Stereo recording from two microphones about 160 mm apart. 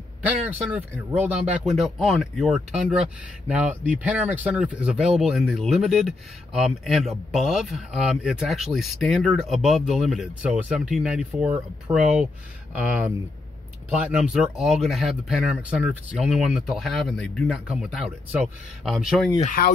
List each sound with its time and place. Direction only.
1.2 s speech: 5° right (ahead or behind)
19.4 s speech: 60° left (ahead or behind)